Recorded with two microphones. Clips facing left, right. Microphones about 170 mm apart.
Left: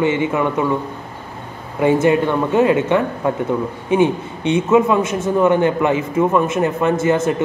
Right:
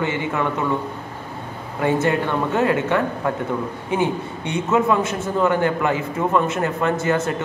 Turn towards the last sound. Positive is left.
turn(degrees=20)  # may be behind; listen again after turning